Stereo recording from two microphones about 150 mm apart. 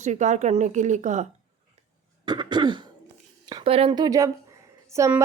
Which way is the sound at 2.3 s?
30° right (ahead or behind).